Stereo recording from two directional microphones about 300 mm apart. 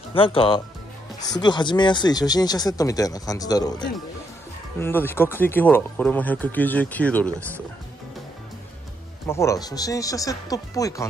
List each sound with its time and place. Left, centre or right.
0.1 s speech: centre
9.3 s speech: centre